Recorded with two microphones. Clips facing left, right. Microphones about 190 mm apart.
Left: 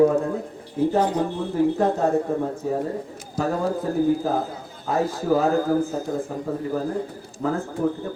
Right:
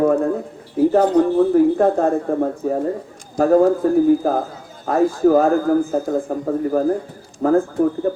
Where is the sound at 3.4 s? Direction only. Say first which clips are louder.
Right 10 dB; 45° right (ahead or behind).